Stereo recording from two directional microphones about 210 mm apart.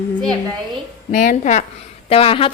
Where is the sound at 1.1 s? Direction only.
35° left (ahead or behind).